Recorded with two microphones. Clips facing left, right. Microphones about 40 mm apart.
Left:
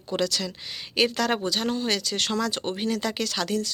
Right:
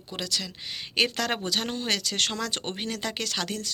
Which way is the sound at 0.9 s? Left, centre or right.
Right.